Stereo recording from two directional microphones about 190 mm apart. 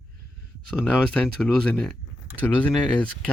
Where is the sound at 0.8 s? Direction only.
5° left (ahead or behind).